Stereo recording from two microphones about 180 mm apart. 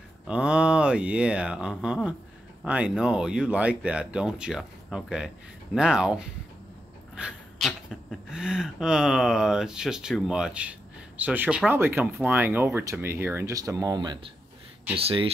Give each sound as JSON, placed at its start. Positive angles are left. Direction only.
{"t": 0.3, "sound": "speech", "side_deg": -5}